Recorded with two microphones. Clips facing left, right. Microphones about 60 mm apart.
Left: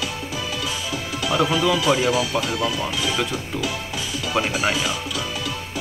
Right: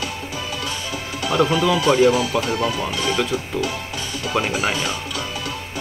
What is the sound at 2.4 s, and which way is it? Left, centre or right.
Speech, right.